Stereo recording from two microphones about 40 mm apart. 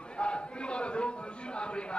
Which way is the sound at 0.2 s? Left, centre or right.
Left.